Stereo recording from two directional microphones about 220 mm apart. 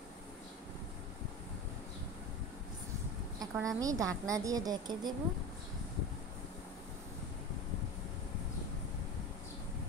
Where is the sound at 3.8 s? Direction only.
15° right (ahead or behind).